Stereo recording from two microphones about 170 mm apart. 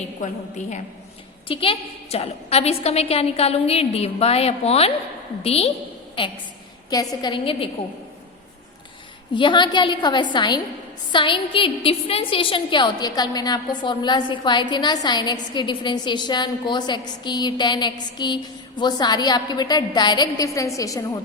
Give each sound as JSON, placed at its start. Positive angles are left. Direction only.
{"t": 1.5, "sound": "a woman's voice", "side_deg": 30}
{"t": 9.3, "sound": "a woman's voice", "side_deg": 30}